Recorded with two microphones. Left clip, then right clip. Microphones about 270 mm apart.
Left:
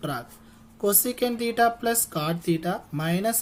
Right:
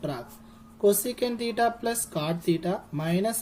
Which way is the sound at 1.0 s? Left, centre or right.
Left.